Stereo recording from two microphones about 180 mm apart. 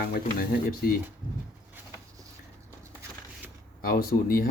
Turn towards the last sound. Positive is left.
turn(degrees=55)  # may be behind; listen again after turning